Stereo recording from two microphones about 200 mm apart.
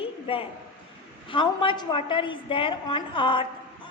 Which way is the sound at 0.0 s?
25° left (ahead or behind).